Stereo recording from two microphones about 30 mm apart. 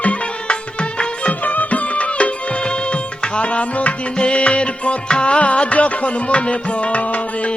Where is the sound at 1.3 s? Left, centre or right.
Left.